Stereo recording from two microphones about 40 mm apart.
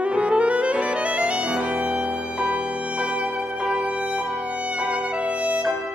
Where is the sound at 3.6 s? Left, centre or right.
Centre; by 5.6 s right.